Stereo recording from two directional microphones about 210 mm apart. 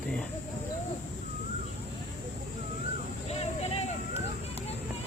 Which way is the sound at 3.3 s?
30° left (ahead or behind).